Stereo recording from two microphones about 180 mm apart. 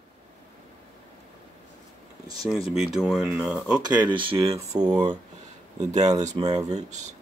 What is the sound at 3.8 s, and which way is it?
Speech, 25° right (ahead or behind).